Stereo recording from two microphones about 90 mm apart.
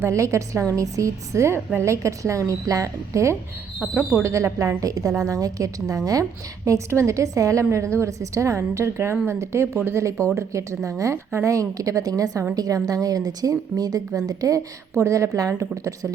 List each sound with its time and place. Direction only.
0.0 s a woman's voice: 35° right (ahead or behind)